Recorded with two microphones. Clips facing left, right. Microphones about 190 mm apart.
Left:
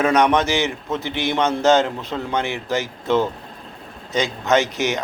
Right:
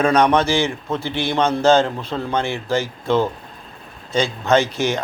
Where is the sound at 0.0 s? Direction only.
20° left (ahead or behind).